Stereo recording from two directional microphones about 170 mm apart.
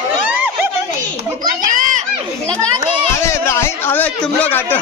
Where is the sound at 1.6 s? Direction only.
50° right (ahead or behind).